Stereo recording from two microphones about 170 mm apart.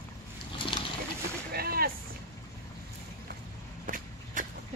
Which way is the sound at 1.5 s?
65° right (ahead or behind).